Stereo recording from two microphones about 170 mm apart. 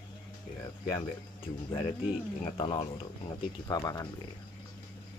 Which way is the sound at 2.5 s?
25° left (ahead or behind).